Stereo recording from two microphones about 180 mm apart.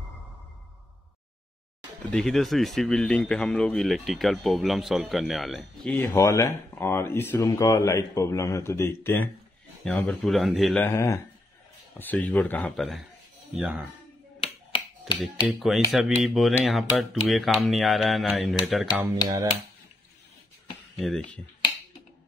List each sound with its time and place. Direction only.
2.0 s speech: 5° left (ahead or behind)
5.9 s speech: 15° left (ahead or behind); by 10.8 s centre (ahead or behind)
10.8 s speech: 15° left (ahead or behind); by 13.8 s 5° right (ahead or behind)
14.4 s finger snapping: 30° left (ahead or behind)
15.4 s speech: centre (ahead or behind)
21.0 s speech: centre (ahead or behind)